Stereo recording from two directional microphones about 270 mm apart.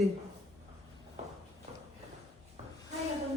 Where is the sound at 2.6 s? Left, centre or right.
Right.